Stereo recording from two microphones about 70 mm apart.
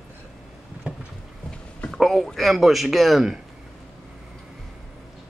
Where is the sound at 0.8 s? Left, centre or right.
Centre.